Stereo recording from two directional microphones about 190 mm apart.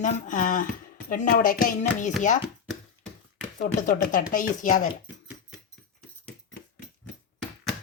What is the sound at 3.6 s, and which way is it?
Speech, 45° left (ahead or behind).